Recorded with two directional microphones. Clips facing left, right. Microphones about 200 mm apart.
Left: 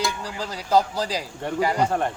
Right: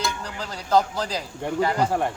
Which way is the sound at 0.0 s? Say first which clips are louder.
Left 2 dB; 10° left (ahead or behind).